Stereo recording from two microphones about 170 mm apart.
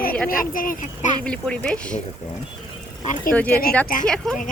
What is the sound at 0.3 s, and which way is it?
Speech, 55° left (ahead or behind).